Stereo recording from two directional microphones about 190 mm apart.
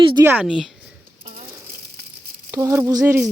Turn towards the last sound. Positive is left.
turn(degrees=-10)  # may be behind; listen again after turning